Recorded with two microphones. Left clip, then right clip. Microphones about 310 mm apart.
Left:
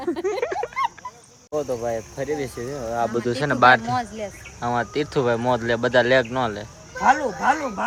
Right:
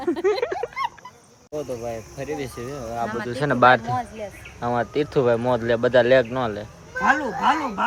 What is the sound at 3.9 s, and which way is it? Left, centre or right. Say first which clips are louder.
Speech: left 2 dB; left.